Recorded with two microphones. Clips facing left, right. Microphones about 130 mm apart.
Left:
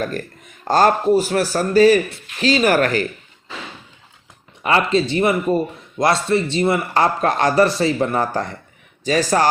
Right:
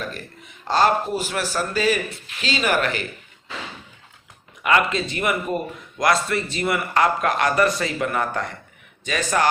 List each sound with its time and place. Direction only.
0.0 s a man's voice: 45° left (ahead or behind)
4.6 s a man's voice: 30° left (ahead or behind)